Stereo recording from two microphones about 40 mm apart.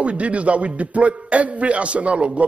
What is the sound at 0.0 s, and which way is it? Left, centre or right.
A man's voice, right.